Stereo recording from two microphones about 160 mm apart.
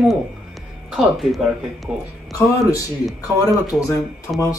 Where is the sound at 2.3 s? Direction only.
20° left (ahead or behind).